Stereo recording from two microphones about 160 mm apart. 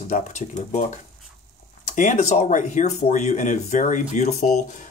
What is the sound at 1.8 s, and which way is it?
Speech, 55° left (ahead or behind).